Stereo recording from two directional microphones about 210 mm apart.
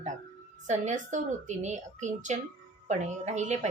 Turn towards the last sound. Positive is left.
turn(degrees=-35)  # may be behind; listen again after turning